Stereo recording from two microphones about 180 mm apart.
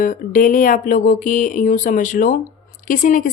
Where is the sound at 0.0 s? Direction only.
50° left (ahead or behind).